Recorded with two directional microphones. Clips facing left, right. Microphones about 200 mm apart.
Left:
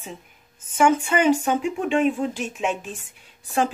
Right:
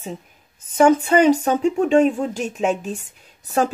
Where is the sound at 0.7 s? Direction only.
35° right (ahead or behind).